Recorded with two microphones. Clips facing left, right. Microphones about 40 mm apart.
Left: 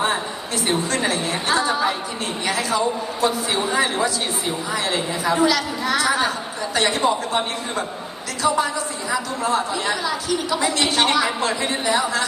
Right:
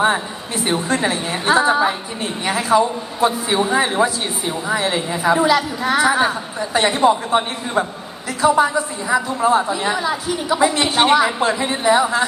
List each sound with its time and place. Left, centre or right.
0.0 s a woman's voice: right